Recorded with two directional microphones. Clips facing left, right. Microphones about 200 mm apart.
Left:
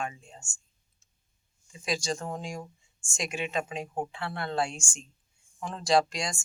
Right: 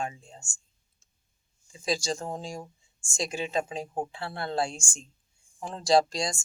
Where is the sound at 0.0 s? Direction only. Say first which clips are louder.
Right 1 dB; 30° right (ahead or behind).